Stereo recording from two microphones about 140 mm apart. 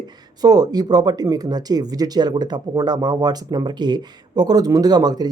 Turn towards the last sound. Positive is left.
turn(degrees=-30)  # may be behind; listen again after turning